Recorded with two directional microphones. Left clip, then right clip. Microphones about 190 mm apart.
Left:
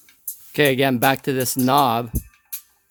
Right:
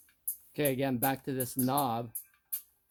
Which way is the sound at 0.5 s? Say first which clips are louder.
Left 14 dB; 45° left (ahead or behind).